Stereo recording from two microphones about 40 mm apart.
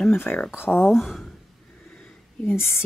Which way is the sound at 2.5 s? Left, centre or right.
Left.